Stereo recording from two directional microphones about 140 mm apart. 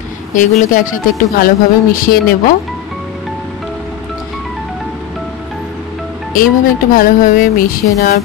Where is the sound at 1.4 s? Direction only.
90° left.